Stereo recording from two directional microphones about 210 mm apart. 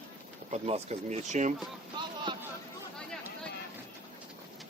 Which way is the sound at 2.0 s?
20° right (ahead or behind).